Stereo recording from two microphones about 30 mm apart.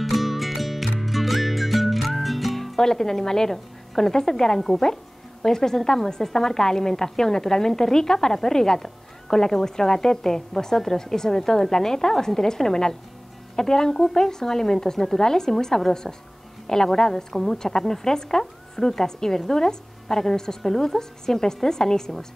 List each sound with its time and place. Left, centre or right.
0.0 s music: centre
2.8 s a woman's voice: centre